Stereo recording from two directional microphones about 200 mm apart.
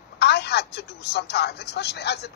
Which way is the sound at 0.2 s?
55° left (ahead or behind).